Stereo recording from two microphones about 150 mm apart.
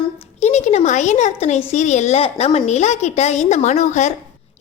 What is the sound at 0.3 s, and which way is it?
A woman's voice, 50° left (ahead or behind).